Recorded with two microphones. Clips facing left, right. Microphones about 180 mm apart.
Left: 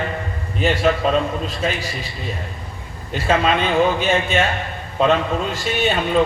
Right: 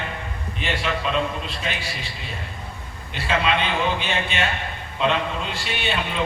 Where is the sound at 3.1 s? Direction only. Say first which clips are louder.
Left 5 dB; 45° left (ahead or behind).